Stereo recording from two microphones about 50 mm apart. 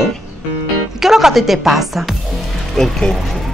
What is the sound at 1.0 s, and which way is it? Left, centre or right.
Speech, centre.